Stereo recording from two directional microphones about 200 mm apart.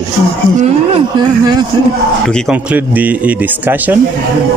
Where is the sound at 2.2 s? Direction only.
5° left (ahead or behind).